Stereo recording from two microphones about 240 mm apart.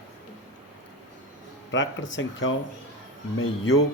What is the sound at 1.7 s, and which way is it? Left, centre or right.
Speech, left.